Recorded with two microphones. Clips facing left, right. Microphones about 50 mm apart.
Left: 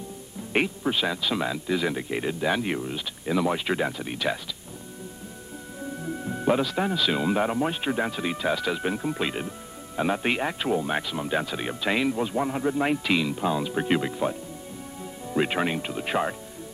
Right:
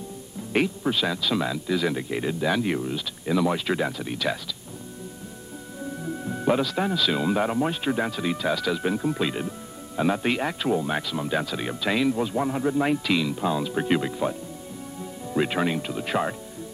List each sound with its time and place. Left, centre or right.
0.5 s speech: centre
6.0 s music: centre
6.9 s speech: centre
8.9 s speech: centre
15.0 s music: centre
15.4 s speech: centre